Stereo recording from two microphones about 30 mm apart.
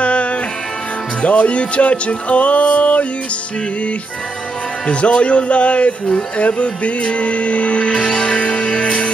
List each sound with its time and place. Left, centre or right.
0.0 s music: left
1.2 s speech: left
4.8 s speech: left
8.1 s music: left